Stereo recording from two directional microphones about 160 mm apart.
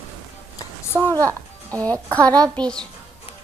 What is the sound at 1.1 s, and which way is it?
Speech, 20° right (ahead or behind).